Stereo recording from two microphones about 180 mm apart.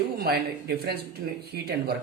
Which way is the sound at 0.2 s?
65° right (ahead or behind).